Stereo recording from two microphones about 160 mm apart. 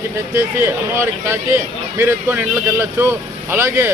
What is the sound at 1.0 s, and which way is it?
A man's voice, 15° right (ahead or behind).